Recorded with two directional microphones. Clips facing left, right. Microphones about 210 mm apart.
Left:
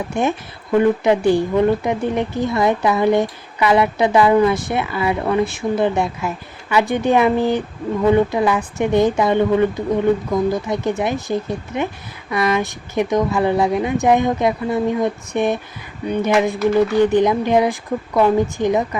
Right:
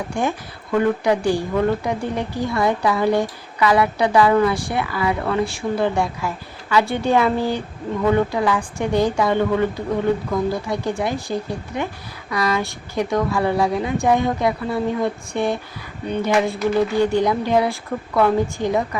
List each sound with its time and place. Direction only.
0.1 s speech: 20° left (ahead or behind)